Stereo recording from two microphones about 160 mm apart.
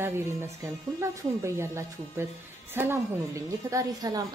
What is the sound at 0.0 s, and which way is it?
A woman's voice, 15° right (ahead or behind).